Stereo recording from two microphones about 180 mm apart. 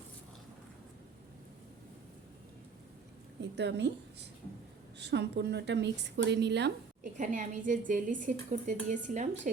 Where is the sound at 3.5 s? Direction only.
70° right (ahead or behind).